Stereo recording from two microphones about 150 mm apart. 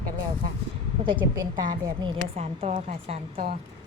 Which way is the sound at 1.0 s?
35° right (ahead or behind).